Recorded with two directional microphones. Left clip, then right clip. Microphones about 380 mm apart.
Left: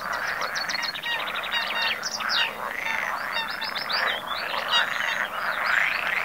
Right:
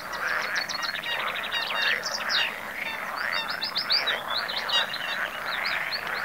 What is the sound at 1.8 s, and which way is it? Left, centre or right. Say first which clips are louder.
Bird: even; left.